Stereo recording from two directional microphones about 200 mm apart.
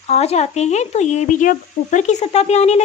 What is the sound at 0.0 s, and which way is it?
Speech, 30° left (ahead or behind).